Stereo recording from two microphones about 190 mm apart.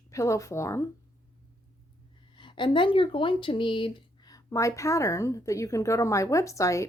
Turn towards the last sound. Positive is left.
turn(degrees=15)  # may be behind; listen again after turning